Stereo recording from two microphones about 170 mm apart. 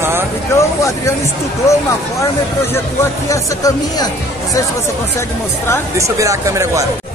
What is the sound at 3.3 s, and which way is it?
Speech, 20° left (ahead or behind).